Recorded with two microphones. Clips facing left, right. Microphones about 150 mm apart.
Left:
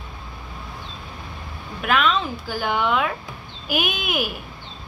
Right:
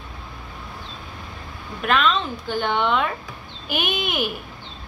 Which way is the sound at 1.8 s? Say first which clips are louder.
Even; 5° left (ahead or behind).